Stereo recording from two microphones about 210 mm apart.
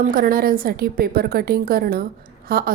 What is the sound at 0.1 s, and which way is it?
A woman's voice, 45° right (ahead or behind).